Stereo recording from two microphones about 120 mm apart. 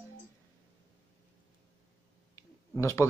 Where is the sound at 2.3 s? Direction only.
25° left (ahead or behind).